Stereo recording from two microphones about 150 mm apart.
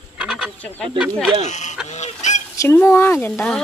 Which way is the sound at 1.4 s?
50° left (ahead or behind).